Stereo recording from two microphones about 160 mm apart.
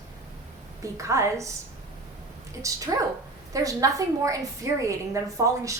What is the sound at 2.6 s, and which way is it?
Speech, 20° right (ahead or behind).